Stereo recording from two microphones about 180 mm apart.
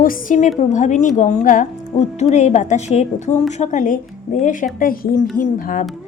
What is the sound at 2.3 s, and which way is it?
A woman's voice, 40° left (ahead or behind).